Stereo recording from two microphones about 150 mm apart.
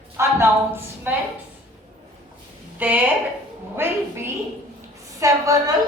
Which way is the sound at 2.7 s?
10° right (ahead or behind).